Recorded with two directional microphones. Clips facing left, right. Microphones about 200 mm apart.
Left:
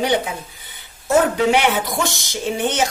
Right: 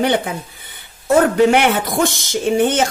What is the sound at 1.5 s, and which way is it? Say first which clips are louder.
Speech: right 2 dB; 50° right (ahead or behind).